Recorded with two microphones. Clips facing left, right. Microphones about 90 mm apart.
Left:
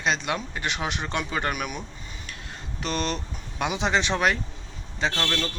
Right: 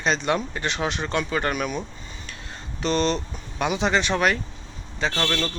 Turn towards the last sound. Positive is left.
turn(degrees=-15)  # may be behind; listen again after turning